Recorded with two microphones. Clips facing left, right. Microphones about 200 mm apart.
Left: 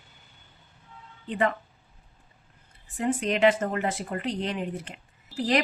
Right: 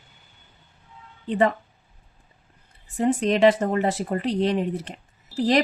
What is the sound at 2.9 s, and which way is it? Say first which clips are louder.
Speech: right 5 dB; 35° right (ahead or behind).